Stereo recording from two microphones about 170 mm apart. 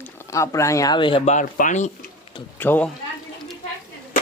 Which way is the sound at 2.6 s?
10° left (ahead or behind).